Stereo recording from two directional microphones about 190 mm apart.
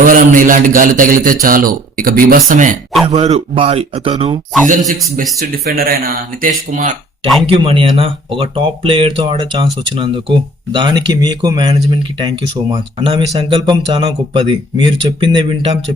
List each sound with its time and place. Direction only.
0.0 s a man's voice: 45° right (ahead or behind); by 4.4 s 30° right (ahead or behind)
4.6 s a man's voice: 40° right (ahead or behind)
7.4 s speech: 30° right (ahead or behind)